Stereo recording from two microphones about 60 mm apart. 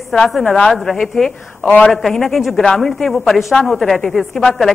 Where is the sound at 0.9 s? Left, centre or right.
Centre.